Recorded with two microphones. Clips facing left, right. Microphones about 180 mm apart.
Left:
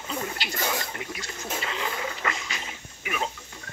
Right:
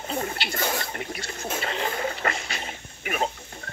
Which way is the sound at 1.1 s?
30° right (ahead or behind).